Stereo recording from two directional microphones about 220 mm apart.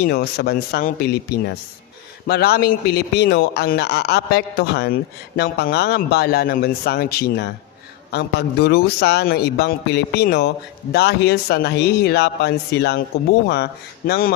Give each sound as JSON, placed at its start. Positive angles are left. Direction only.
{"t": 0.0, "sound": "a man's voice", "side_deg": 45}